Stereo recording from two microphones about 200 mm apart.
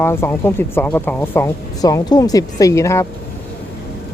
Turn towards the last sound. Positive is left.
turn(degrees=15)  # may be behind; listen again after turning